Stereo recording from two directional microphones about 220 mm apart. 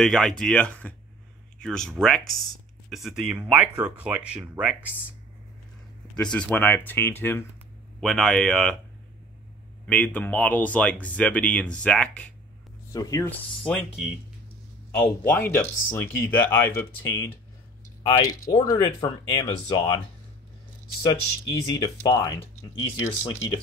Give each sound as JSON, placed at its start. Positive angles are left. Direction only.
{"t": 0.0, "sound": "speech", "side_deg": 0}
{"t": 6.1, "sound": "speech", "side_deg": 5}
{"t": 9.8, "sound": "speech", "side_deg": 5}
{"t": 12.9, "sound": "speech", "side_deg": 15}
{"t": 15.0, "sound": "speech", "side_deg": 10}
{"t": 21.1, "sound": "speech", "side_deg": 15}